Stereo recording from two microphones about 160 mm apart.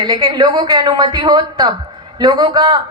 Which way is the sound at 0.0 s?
25° right (ahead or behind).